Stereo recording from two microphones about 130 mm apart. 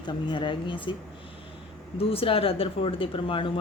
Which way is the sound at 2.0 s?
45° left (ahead or behind).